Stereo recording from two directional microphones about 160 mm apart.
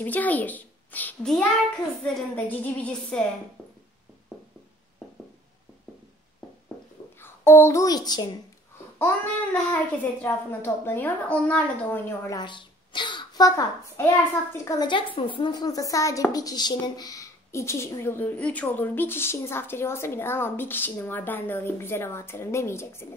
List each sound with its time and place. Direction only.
0.0 s a woman's voice: 10° left (ahead or behind)
7.2 s a child's voice: 15° left (ahead or behind)
8.9 s a woman's voice: 10° left (ahead or behind)
12.4 s a child's voice: 30° left (ahead or behind)